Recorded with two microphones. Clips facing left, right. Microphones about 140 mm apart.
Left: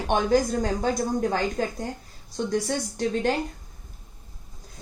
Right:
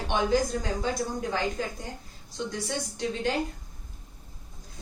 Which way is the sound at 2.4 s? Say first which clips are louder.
Left 5 dB; 50° left (ahead or behind).